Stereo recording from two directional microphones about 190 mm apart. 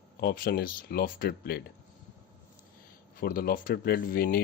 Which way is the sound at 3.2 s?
50° left (ahead or behind).